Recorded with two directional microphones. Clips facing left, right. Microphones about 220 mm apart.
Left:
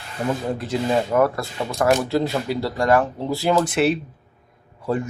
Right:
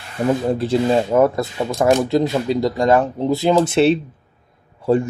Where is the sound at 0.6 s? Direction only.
30° right (ahead or behind).